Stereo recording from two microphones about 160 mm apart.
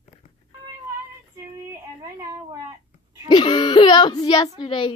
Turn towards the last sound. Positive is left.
turn(degrees=30)  # may be behind; listen again after turning